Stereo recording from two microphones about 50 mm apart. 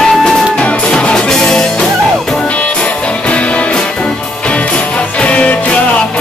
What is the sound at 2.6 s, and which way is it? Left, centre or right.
Music, left.